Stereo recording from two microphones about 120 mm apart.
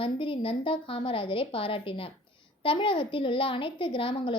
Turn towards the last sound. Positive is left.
turn(degrees=45)  # may be behind; listen again after turning